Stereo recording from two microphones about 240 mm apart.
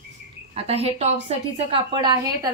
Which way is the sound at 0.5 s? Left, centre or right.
Right.